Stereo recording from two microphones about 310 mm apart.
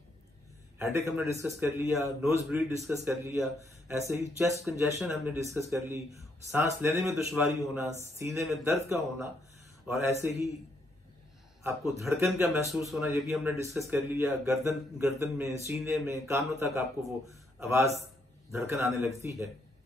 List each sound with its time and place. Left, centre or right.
0.7 s a man's voice: centre
11.6 s a man's voice: centre